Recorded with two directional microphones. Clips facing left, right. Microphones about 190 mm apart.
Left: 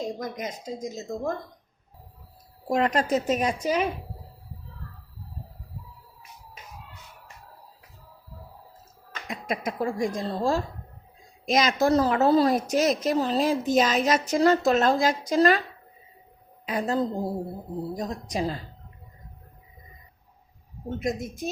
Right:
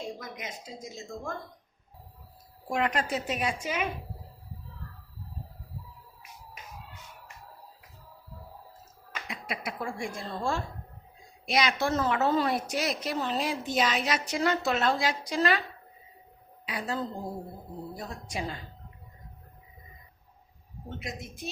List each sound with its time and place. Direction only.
0.0 s a woman's voice: 40° left (ahead or behind)
2.6 s a woman's voice: 35° left (ahead or behind)
9.2 s a woman's voice: 45° left (ahead or behind)
16.6 s a woman's voice: 45° left (ahead or behind)
21.0 s a woman's voice: 45° left (ahead or behind)